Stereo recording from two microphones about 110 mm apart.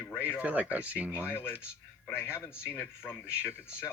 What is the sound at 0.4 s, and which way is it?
Speech, 15° right (ahead or behind).